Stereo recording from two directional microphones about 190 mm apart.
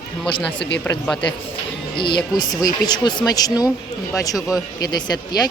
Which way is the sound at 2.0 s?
25° left (ahead or behind).